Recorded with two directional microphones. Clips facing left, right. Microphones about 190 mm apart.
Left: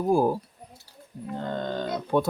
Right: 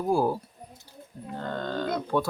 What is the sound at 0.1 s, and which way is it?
Speech, 15° left (ahead or behind).